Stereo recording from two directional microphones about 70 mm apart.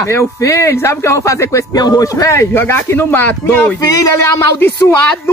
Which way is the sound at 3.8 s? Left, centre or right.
Left.